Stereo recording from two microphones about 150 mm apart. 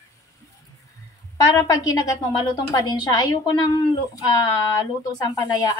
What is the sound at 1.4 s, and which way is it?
A woman's voice, 25° left (ahead or behind).